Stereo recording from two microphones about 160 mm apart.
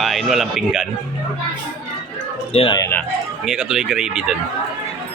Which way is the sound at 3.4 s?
5° right (ahead or behind).